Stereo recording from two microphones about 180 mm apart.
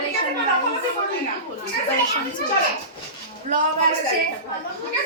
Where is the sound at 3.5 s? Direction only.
40° right (ahead or behind).